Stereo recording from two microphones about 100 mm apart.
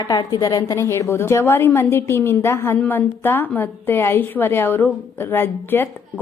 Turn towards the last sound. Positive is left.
turn(degrees=20)  # may be behind; listen again after turning